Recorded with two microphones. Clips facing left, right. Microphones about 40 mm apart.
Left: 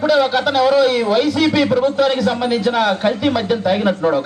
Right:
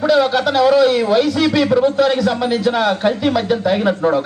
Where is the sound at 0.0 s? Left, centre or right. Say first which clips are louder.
Right 1 dB; centre.